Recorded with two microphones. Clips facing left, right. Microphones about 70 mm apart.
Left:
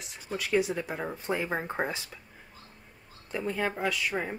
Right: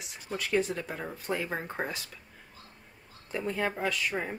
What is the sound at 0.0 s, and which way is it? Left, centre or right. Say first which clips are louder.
Speech: left 1 dB; centre.